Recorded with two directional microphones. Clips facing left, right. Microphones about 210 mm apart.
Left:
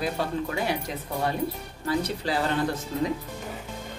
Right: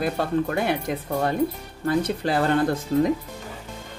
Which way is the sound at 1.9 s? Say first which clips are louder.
Right 4 dB; 55° right (ahead or behind).